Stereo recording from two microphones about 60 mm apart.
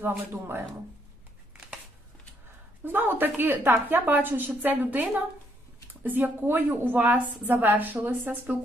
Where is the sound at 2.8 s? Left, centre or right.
Right.